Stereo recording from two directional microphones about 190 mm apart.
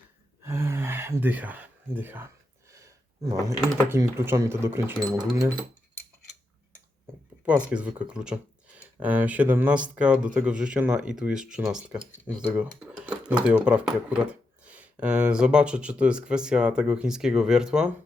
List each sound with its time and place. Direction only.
0.4 s gasp: 15° right (ahead or behind)
2.7 s speech: 15° right (ahead or behind)
7.4 s speech: 5° right (ahead or behind)
12.5 s a sound: 5° right (ahead or behind)
13.4 s speech: 5° right (ahead or behind)